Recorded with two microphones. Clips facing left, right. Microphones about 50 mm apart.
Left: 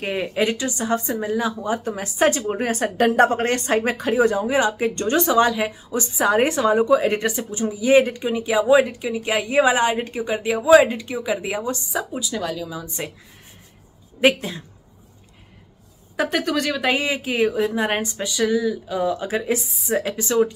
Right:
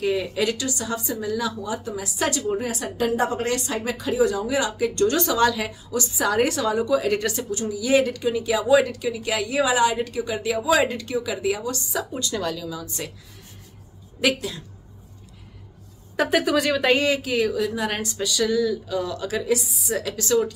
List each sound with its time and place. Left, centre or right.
0.0 s speech: left
11.9 s a woman's voice: centre
12.6 s speech: left
14.2 s speech: left
16.2 s a woman's voice: centre
17.3 s speech: left